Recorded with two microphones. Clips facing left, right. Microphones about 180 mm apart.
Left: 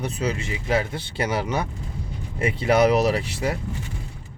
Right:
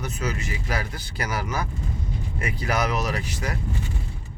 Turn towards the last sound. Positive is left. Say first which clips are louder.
# left 5 dB
turn(degrees=30)  # may be behind; listen again after turning